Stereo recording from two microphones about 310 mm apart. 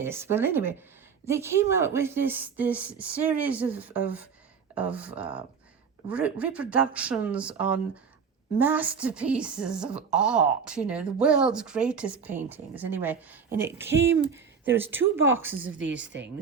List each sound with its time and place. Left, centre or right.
0.0 s a woman's voice: centre
16.1 s speech: right